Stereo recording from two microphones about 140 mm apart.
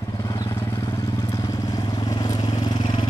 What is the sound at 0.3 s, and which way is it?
Vehicle, 30° left (ahead or behind).